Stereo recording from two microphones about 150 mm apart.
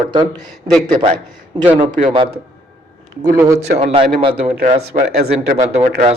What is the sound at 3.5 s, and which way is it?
Speech, 45° right (ahead or behind).